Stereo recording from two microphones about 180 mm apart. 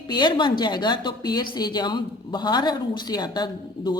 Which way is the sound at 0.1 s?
25° left (ahead or behind).